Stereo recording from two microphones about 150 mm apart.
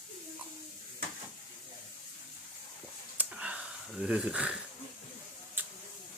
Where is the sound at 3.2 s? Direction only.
10° right (ahead or behind).